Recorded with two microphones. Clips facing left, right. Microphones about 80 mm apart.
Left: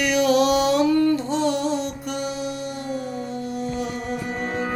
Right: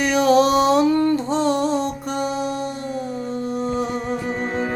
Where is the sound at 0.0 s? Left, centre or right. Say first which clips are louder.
Right 3 dB; right.